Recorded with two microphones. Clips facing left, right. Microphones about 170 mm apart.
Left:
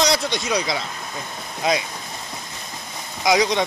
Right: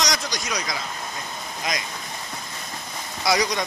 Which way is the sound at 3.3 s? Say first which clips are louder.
Left 4 dB; 20° left (ahead or behind).